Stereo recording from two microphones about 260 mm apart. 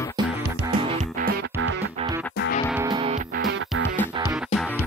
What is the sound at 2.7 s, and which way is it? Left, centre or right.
Music, centre.